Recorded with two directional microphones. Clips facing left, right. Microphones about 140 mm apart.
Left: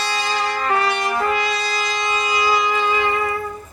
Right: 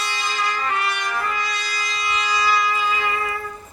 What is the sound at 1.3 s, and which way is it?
Brass instrument, 90° left.